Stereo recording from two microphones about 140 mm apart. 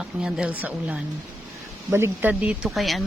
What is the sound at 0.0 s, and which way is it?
Speech, 5° right (ahead or behind).